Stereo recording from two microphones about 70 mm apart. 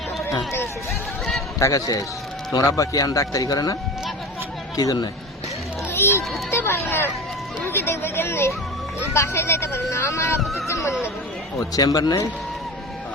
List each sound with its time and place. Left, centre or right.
1.5 s speech: left
4.8 s speech: left
5.9 s speech: left
11.5 s speech: left